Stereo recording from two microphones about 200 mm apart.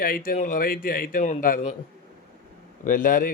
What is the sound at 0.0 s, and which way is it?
A man's voice, 45° left (ahead or behind).